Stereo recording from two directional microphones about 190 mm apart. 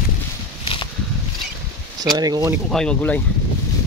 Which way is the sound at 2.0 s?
20° right (ahead or behind).